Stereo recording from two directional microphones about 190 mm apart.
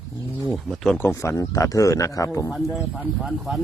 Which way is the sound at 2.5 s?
Centre (ahead or behind).